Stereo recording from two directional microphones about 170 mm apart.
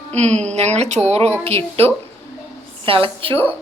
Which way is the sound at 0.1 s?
40° right (ahead or behind).